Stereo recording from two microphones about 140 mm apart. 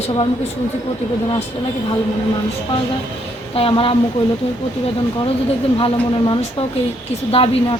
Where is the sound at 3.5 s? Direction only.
40° left (ahead or behind).